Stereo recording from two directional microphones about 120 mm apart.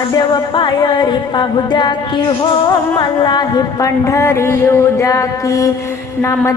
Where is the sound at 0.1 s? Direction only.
35° left (ahead or behind).